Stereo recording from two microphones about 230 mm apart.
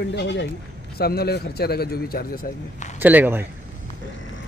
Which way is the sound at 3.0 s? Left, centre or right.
Centre.